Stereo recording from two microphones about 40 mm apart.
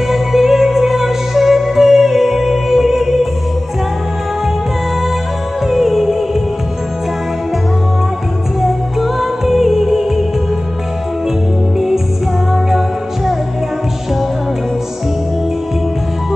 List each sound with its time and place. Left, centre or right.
0.1 s music: centre
5.7 s music: centre
8.5 s music: centre
12.6 s music: centre